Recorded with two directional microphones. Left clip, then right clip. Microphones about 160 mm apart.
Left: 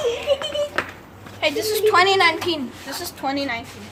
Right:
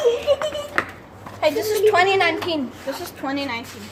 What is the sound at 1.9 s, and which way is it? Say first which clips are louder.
Speech: left 2 dB; 40° left (ahead or behind).